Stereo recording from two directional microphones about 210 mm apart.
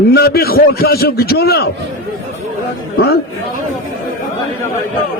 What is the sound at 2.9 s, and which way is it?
Speech, 50° left (ahead or behind).